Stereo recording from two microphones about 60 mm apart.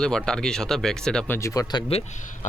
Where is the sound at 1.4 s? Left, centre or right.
Left.